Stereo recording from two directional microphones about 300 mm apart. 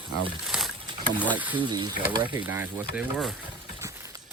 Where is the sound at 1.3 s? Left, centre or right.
Centre.